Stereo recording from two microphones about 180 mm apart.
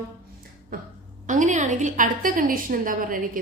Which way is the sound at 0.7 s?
50° right (ahead or behind).